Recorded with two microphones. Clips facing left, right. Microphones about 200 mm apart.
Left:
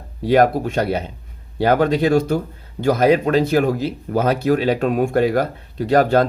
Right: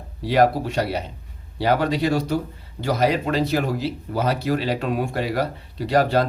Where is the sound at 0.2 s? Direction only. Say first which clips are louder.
Left 3 dB; 50° left (ahead or behind).